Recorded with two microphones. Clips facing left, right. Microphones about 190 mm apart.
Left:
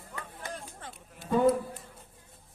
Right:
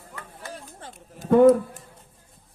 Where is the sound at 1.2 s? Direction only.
45° right (ahead or behind).